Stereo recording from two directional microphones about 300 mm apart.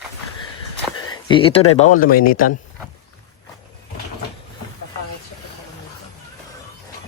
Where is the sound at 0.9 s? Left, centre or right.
Centre.